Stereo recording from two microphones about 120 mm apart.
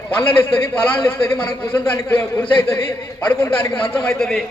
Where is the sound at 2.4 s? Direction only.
45° left (ahead or behind).